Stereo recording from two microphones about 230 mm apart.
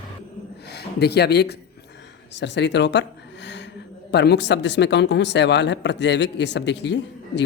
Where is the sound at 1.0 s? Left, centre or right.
Left.